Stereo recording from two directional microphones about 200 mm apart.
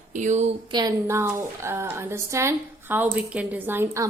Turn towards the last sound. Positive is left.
turn(degrees=-15)  # may be behind; listen again after turning